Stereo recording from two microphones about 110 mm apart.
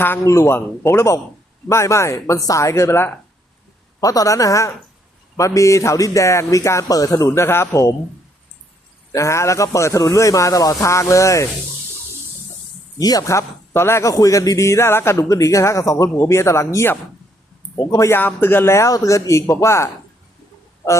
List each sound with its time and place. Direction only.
0.0 s speech: 25° left (ahead or behind)
4.0 s speech: 30° left (ahead or behind)
9.1 s speech: 25° left (ahead or behind)
13.0 s speech: 35° left (ahead or behind)